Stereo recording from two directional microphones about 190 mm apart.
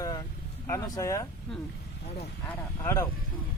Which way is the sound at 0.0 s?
20° left (ahead or behind).